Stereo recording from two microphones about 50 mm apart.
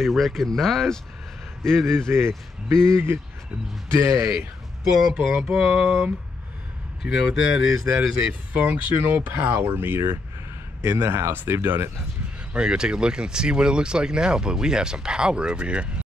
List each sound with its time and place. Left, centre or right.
0.0 s speech: centre
2.0 s speech: right
4.8 s speech: centre
5.1 s music: centre
5.4 s speech: centre
7.1 s speech: centre
8.9 s speech: right
12.5 s speech: centre